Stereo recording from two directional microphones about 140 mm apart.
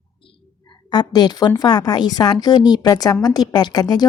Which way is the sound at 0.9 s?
30° left (ahead or behind).